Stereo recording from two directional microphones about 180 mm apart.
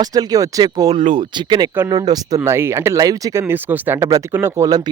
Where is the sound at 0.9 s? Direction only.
30° right (ahead or behind).